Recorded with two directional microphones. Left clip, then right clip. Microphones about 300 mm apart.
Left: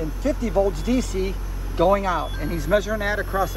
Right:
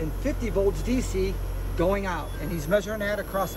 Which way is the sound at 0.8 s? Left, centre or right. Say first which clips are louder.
Left 3 dB; centre.